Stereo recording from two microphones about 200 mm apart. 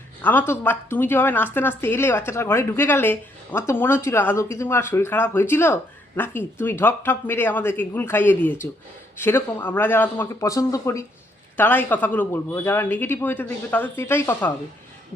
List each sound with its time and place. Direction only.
0.2 s a woman's voice: 10° left (ahead or behind)